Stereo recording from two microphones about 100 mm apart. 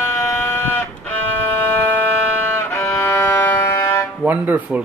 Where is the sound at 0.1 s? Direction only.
25° left (ahead or behind).